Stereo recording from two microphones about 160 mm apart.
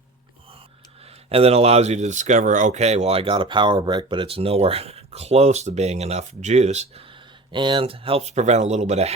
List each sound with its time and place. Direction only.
1.3 s speech: 40° right (ahead or behind)